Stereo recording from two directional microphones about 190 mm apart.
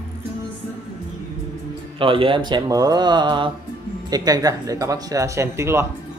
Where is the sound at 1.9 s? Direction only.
30° right (ahead or behind).